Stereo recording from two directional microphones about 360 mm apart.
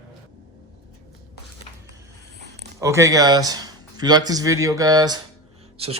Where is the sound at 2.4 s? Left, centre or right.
Right.